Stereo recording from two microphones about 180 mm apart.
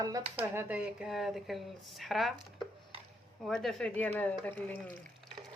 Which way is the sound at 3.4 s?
Centre (ahead or behind).